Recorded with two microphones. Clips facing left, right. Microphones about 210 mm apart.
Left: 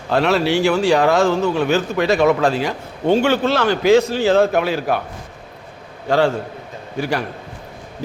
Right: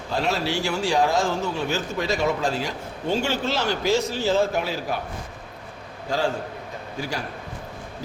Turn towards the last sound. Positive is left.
turn(degrees=65)  # may be behind; listen again after turning